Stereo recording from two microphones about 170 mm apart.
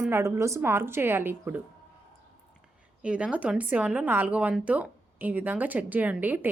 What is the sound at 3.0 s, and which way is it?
Speech, 5° right (ahead or behind).